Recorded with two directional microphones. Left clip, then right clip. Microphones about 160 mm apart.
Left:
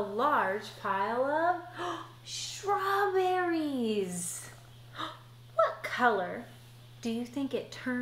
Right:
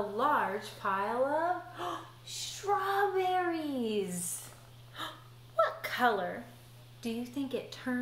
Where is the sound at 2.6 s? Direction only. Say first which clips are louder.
Left 1 dB; 30° left (ahead or behind).